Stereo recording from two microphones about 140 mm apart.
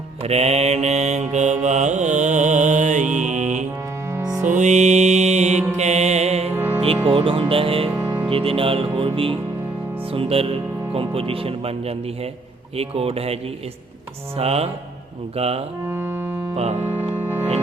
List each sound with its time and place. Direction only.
0.2 s mantra: 45° right (ahead or behind)
4.5 s music: 55° right (ahead or behind)
6.5 s music: 15° right (ahead or behind)
7.1 s music: 40° right (ahead or behind)
10.1 s speech: 40° right (ahead or behind)
15.9 s organ: 15° right (ahead or behind)
16.8 s music: 15° right (ahead or behind)